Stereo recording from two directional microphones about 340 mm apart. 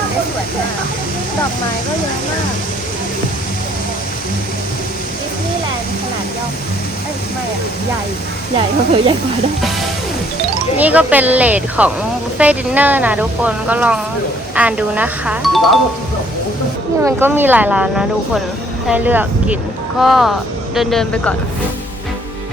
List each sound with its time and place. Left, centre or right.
10.8 s speech: centre
17.0 s speech: centre